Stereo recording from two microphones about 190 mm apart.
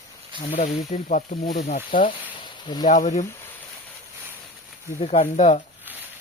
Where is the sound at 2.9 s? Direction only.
40° left (ahead or behind).